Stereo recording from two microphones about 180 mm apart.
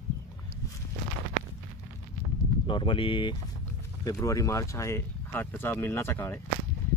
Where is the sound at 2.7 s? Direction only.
25° left (ahead or behind).